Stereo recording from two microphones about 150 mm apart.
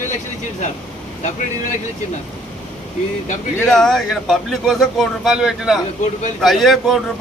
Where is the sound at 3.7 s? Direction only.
5° left (ahead or behind).